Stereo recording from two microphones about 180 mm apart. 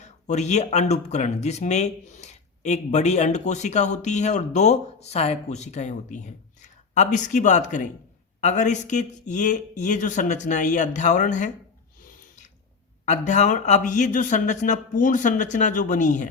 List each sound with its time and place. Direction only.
0.0 s speech: 40° left (ahead or behind)
13.1 s speech: 40° left (ahead or behind)